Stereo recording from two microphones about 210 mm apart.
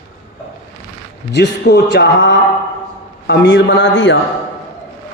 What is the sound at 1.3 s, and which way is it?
A man's voice, 50° left (ahead or behind).